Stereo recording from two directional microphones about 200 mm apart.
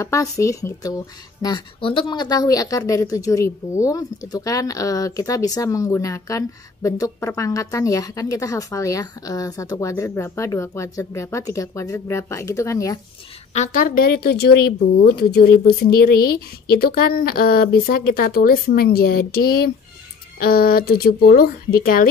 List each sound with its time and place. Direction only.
0.0 s speech: 15° left (ahead or behind)
13.5 s speech: 40° left (ahead or behind)